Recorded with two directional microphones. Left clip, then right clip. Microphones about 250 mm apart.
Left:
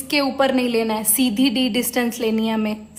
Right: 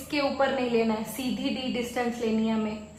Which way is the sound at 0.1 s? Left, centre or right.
Left.